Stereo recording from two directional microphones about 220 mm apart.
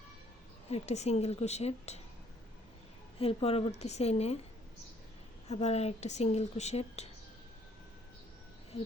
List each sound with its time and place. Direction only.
0.7 s speech: 30° left (ahead or behind)
3.2 s speech: 25° left (ahead or behind)
5.5 s speech: 30° left (ahead or behind)